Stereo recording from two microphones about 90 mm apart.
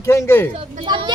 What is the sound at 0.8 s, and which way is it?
Speech, 55° right (ahead or behind).